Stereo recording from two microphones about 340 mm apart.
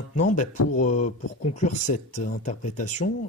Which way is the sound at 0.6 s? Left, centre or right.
Left.